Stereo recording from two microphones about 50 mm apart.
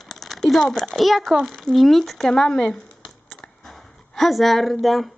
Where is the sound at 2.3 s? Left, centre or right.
Centre.